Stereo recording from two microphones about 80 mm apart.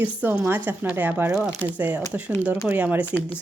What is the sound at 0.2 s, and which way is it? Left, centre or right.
A woman's voice, centre.